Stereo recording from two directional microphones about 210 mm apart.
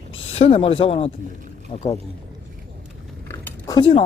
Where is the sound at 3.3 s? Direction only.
15° left (ahead or behind).